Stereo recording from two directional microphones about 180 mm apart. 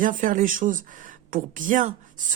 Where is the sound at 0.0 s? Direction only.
45° right (ahead or behind).